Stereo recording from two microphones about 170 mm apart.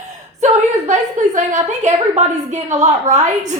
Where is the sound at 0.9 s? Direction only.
45° right (ahead or behind).